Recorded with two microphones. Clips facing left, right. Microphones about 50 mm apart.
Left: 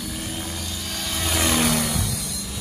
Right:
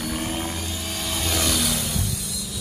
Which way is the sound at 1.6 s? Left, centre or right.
Left.